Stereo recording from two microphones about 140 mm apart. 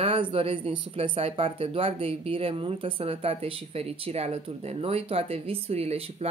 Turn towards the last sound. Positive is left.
turn(degrees=-50)  # may be behind; listen again after turning